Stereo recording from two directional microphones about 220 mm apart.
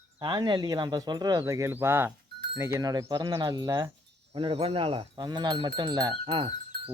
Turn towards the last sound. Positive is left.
turn(degrees=-25)  # may be behind; listen again after turning